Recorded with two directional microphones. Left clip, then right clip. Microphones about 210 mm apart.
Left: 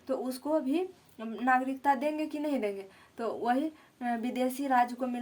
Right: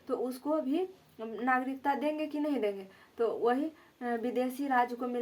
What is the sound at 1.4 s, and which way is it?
Speech, 45° left (ahead or behind).